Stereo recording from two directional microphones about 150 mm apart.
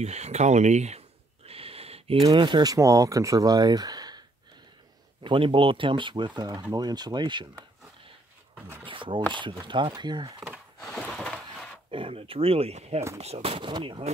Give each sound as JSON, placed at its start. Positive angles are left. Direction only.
{"t": 0.0, "sound": "a sound", "side_deg": -45}
{"t": 2.2, "sound": "speech", "side_deg": -30}
{"t": 5.2, "sound": "speech", "side_deg": -35}
{"t": 8.8, "sound": "speech", "side_deg": -35}
{"t": 10.4, "sound": "a sound", "side_deg": 0}
{"t": 11.9, "sound": "speech", "side_deg": -35}